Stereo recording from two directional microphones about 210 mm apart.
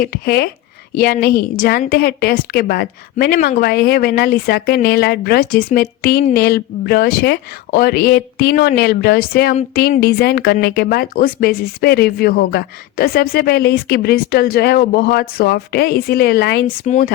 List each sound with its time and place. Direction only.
0.0 s a woman's voice: 45° left (ahead or behind)
16.6 s speech: 35° left (ahead or behind)